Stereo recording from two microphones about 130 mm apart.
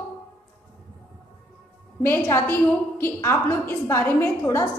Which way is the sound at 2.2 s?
20° left (ahead or behind).